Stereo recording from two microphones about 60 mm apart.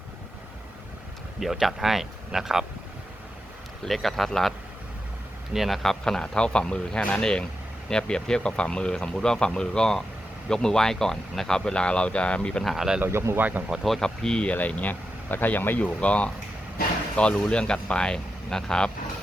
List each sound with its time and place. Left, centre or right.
1.4 s speech: centre
3.8 s speech: centre
5.5 s speech: centre
12.6 s speech: centre
13.1 s speech: right
13.8 s speech: centre
14.4 s speech: left